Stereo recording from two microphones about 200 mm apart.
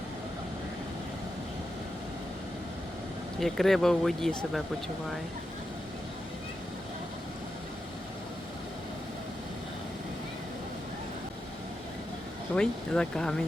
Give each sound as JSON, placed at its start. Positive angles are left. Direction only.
{"t": 3.4, "sound": "speech", "side_deg": 0}
{"t": 12.5, "sound": "speech", "side_deg": 5}